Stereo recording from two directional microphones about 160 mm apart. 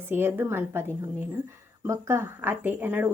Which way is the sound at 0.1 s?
15° right (ahead or behind).